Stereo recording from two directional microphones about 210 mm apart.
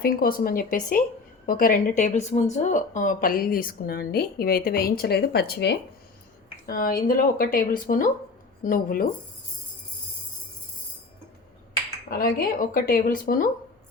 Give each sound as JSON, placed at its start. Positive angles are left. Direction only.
{"t": 0.0, "sound": "a woman's voice", "side_deg": 45}
{"t": 12.0, "sound": "a woman's voice", "side_deg": 45}